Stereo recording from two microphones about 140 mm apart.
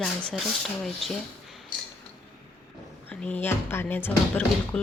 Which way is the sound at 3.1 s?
10° left (ahead or behind).